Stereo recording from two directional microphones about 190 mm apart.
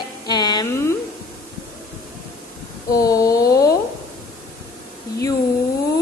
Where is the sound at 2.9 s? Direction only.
20° left (ahead or behind).